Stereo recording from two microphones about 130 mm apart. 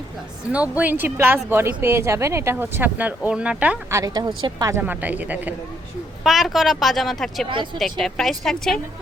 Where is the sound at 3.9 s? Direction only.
30° right (ahead or behind).